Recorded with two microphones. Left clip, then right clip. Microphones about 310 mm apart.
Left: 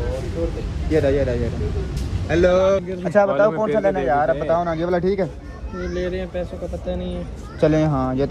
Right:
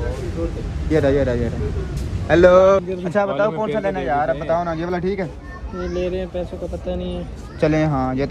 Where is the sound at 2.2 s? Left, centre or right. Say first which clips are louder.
Right 5 dB; centre.